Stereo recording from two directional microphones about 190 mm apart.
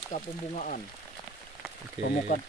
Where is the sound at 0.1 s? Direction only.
40° left (ahead or behind).